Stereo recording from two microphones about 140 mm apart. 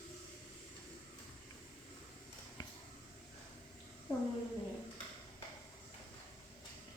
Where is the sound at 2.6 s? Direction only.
30° left (ahead or behind).